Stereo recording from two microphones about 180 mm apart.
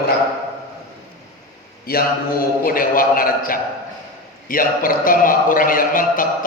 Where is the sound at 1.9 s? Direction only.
55° left (ahead or behind).